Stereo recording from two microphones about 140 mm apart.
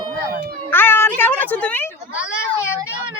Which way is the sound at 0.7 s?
15° left (ahead or behind).